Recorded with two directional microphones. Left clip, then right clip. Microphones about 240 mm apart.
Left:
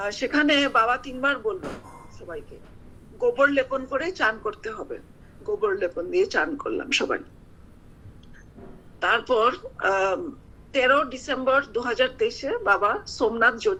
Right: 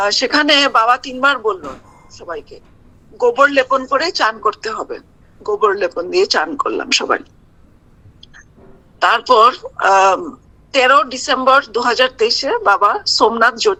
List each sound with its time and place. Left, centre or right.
0.0 s a man's voice: right
3.2 s a man's voice: right
9.0 s a woman's voice: right